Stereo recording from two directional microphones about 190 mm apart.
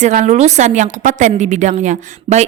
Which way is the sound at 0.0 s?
40° right (ahead or behind).